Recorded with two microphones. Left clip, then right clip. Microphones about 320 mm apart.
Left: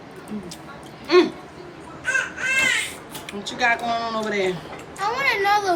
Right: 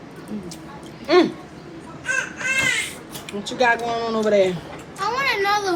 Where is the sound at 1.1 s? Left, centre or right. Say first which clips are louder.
Even; centre.